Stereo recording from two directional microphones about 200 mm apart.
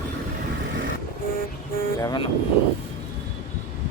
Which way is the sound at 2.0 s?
20° left (ahead or behind).